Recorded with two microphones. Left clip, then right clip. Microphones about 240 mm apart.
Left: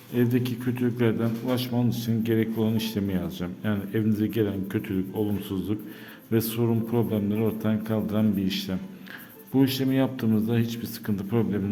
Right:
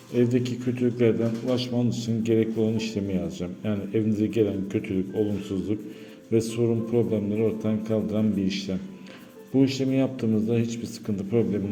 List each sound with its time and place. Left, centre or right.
0.1 s a man's voice: centre